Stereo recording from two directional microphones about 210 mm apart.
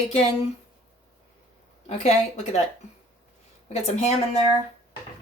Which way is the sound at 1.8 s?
35° left (ahead or behind).